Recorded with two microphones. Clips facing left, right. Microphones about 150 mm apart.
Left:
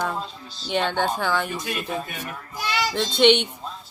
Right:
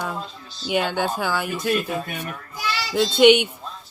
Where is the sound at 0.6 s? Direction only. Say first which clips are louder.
Right 1 dB; 10° right (ahead or behind).